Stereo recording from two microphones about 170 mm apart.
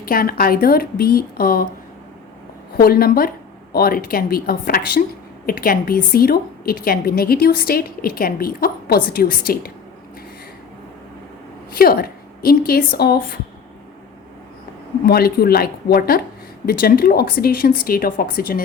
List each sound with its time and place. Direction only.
0.0 s speech: 60° left (ahead or behind)
2.7 s speech: 60° left (ahead or behind)
11.7 s a woman's voice: 60° left (ahead or behind)
15.0 s speech: 65° left (ahead or behind)